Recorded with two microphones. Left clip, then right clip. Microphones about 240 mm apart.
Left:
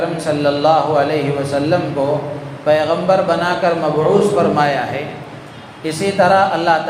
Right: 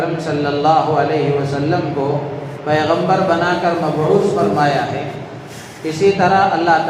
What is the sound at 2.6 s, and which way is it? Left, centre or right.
Mantra, left.